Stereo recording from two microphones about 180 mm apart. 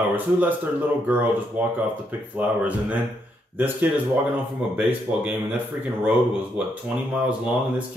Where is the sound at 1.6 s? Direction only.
10° right (ahead or behind).